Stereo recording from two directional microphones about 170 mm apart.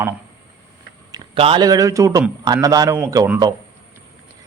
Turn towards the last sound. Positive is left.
turn(degrees=-20)  # may be behind; listen again after turning